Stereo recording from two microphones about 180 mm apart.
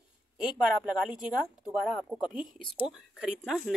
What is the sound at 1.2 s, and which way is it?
Speech, 5° right (ahead or behind).